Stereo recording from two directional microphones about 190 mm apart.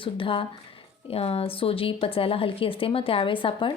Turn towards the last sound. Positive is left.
turn(degrees=25)  # may be behind; listen again after turning